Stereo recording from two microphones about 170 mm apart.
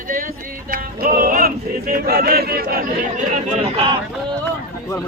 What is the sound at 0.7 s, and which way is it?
Male singing, 55° right (ahead or behind).